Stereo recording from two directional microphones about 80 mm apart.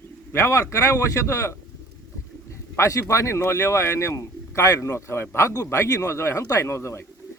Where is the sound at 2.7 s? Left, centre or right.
Left.